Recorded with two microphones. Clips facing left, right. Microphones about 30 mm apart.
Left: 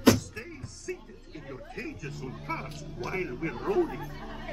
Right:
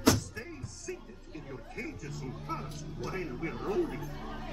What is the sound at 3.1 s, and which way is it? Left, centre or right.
Speech, left.